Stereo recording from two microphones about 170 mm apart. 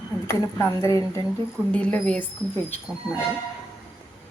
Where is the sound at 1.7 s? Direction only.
5° left (ahead or behind).